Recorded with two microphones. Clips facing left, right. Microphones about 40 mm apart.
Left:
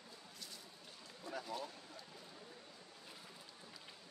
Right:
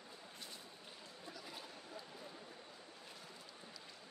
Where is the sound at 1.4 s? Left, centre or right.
Centre.